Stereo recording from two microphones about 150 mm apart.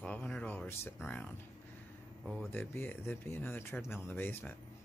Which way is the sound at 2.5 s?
15° left (ahead or behind).